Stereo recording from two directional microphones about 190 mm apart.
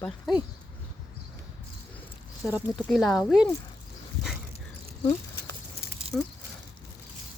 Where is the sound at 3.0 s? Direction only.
15° left (ahead or behind).